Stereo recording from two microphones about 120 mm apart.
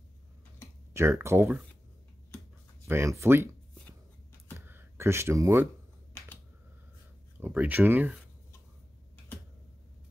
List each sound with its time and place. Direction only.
0.9 s speech: 20° right (ahead or behind)
2.9 s speech: 20° right (ahead or behind)
4.6 s a sound: 20° right (ahead or behind)
7.3 s speech: 15° right (ahead or behind)